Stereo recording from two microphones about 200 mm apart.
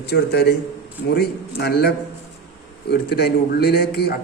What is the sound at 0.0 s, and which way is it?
A man's voice, 55° left (ahead or behind).